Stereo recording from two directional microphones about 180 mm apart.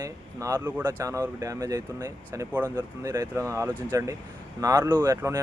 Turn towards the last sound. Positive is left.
turn(degrees=-20)  # may be behind; listen again after turning